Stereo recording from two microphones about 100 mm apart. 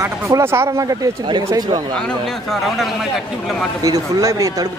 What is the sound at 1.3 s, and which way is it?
Speech, 45° right (ahead or behind).